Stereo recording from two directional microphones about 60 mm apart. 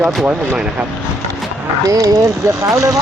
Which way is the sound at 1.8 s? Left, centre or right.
Right.